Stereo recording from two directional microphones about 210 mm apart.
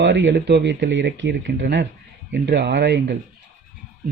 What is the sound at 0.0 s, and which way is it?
Speech, 60° right (ahead or behind).